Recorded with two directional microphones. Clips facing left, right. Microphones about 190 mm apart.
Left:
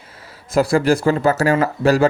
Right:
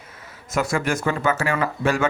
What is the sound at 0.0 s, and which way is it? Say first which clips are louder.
Speech: left 1 dB; 30° left (ahead or behind).